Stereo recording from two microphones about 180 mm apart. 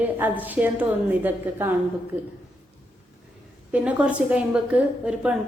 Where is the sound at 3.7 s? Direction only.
5° right (ahead or behind).